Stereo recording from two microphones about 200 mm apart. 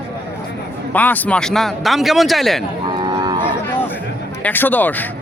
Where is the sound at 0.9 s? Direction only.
10° left (ahead or behind).